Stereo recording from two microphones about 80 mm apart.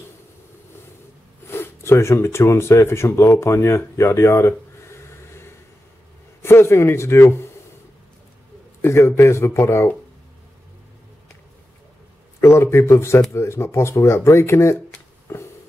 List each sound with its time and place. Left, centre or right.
1.5 s a man's voice: left
8.8 s speech: left
12.4 s speech: left
15.3 s a sound: left